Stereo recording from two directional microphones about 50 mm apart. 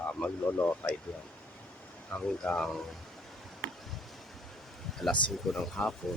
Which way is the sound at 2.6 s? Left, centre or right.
Centre.